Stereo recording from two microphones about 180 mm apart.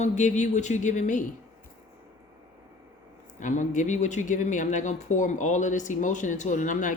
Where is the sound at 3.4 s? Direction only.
45° left (ahead or behind).